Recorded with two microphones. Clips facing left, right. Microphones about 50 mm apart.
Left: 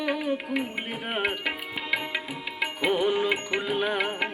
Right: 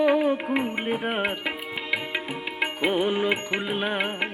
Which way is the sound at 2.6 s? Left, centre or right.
Right.